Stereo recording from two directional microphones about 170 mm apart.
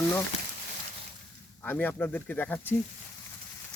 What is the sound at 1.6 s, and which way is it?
Speech, 10° left (ahead or behind).